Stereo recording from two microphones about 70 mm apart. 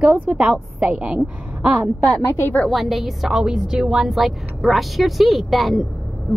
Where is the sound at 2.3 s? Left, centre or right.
Left.